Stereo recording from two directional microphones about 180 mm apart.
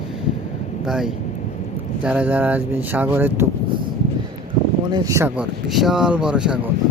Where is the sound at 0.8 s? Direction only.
Centre (ahead or behind).